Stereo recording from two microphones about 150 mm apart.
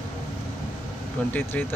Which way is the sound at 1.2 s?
10° left (ahead or behind).